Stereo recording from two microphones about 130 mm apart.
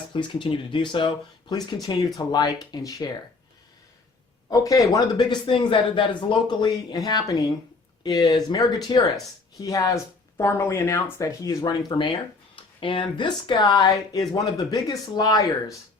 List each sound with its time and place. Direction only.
0.1 s speech: 40° left (ahead or behind)
4.4 s speech: 25° left (ahead or behind)
5.5 s speech: 40° left (ahead or behind)